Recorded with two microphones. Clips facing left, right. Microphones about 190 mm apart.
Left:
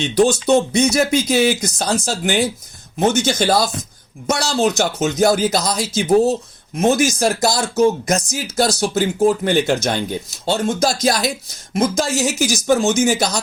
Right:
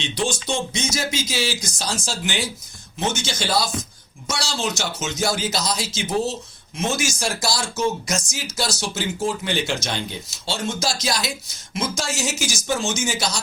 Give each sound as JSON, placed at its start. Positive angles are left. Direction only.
{"t": 0.3, "sound": "speech", "side_deg": 60}
{"t": 7.2, "sound": "speech", "side_deg": 40}
{"t": 8.3, "sound": "speech", "side_deg": 50}